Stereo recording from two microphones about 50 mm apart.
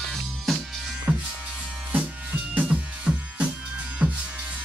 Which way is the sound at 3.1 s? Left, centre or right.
Centre.